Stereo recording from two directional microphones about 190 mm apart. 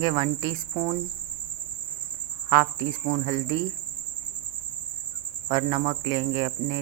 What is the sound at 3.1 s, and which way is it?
Speech, 25° right (ahead or behind).